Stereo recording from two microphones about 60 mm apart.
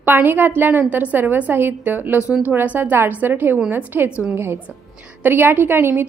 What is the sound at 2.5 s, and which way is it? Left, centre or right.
A woman's voice, right.